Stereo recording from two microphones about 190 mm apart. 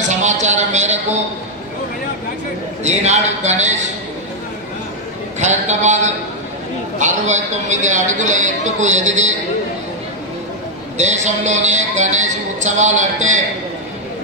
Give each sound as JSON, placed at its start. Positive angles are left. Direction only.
{"t": 0.1, "sound": "a sound", "side_deg": -40}
{"t": 2.8, "sound": "speech", "side_deg": -35}
{"t": 5.4, "sound": "speech", "side_deg": -40}
{"t": 11.0, "sound": "speech", "side_deg": -40}